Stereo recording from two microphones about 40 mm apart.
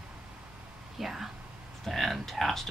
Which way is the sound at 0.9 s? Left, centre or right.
Centre.